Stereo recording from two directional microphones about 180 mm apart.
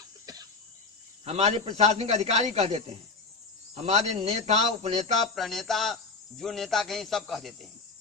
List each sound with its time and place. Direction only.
0.3 s cough: 20° right (ahead or behind)
1.2 s a man's voice: 35° right (ahead or behind)
5.3 s speech: centre (ahead or behind)